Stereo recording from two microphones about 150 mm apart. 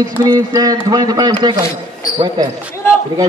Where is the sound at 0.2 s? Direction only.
25° right (ahead or behind).